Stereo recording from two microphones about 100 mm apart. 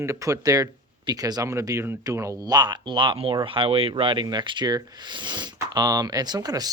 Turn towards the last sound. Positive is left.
turn(degrees=-40)  # may be behind; listen again after turning